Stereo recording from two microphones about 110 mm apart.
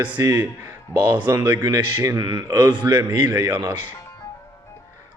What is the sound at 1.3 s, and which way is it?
A man's voice, 30° right (ahead or behind).